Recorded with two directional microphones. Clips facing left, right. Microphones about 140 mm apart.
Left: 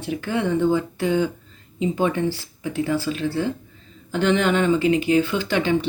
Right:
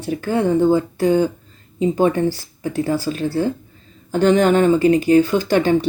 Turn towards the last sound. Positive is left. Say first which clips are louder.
# right 5 dB
turn(degrees=-45)  # may be behind; listen again after turning